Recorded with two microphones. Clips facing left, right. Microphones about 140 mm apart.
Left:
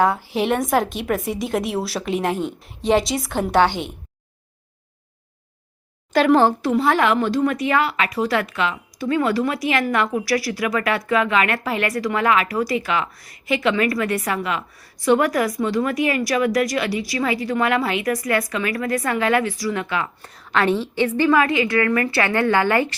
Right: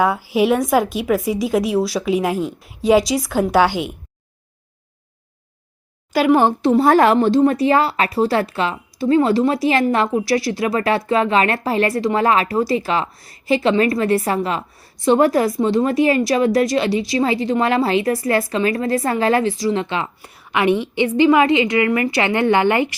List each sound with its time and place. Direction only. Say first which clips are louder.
0.0 s speech: right 3 dB; 5° right (ahead or behind)
6.1 s a woman's voice: right 1 dB; 5° right (ahead or behind)
6.4 s a woman's voice: right 2 dB; 20° right (ahead or behind)
6.7 s a woman's voice: right 7 dB; 40° right (ahead or behind)
20.2 s a woman's voice: right 3 dB; 10° right (ahead or behind)